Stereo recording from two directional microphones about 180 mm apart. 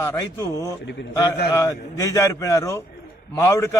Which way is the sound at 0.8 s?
75° left (ahead or behind).